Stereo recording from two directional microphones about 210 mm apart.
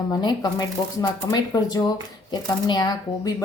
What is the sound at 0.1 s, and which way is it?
Speech, 20° left (ahead or behind).